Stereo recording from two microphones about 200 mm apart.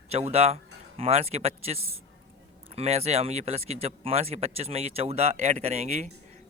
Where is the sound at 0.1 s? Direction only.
30° right (ahead or behind).